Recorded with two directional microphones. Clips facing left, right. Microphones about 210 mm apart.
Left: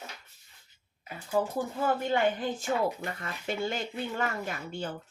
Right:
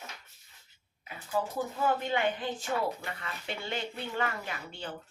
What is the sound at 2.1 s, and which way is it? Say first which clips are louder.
Speech: left 3 dB; 45° left (ahead or behind).